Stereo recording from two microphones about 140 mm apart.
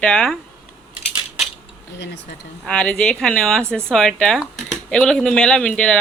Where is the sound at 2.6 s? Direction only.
5° left (ahead or behind).